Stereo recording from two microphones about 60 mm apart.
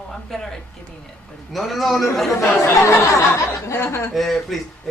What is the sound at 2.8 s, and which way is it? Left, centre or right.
Speech, left.